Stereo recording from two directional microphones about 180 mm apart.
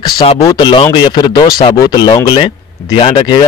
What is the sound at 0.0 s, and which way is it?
Speech, 25° left (ahead or behind).